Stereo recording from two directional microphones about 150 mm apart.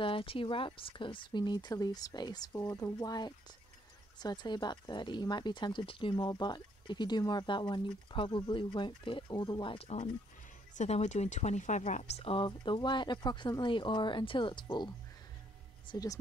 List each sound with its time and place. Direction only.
0.0 s speech: 35° left (ahead or behind)
15.9 s speech: 25° left (ahead or behind)